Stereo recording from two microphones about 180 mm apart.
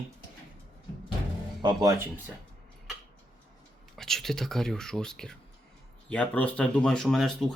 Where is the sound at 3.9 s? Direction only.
Centre (ahead or behind).